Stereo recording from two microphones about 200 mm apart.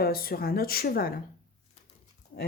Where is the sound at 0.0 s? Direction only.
50° left (ahead or behind).